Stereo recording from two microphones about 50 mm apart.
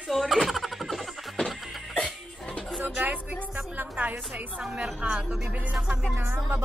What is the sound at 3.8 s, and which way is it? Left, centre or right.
Speech, right.